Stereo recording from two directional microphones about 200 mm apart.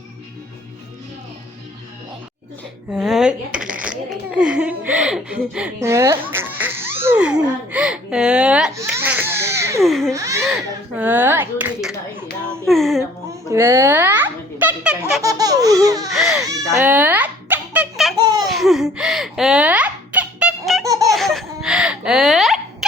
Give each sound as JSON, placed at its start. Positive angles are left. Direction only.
{"t": 2.9, "sound": "shuffling cards", "side_deg": 0}
{"t": 7.0, "sound": "speech", "side_deg": -10}
{"t": 8.7, "sound": "laughter", "side_deg": -15}
{"t": 9.8, "sound": "speech", "side_deg": 0}
{"t": 10.1, "sound": "speech", "side_deg": -15}
{"t": 13.5, "sound": "a sound", "side_deg": -15}
{"t": 15.2, "sound": "laughter", "side_deg": -15}
{"t": 16.2, "sound": "baby cry", "side_deg": -15}
{"t": 18.2, "sound": "laughter", "side_deg": -20}
{"t": 18.4, "sound": "giggle", "side_deg": 0}
{"t": 20.8, "sound": "laughter", "side_deg": -15}
{"t": 21.1, "sound": "giggle", "side_deg": 0}